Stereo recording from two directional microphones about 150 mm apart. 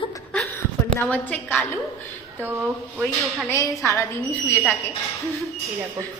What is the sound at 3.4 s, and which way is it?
Speech, 20° left (ahead or behind).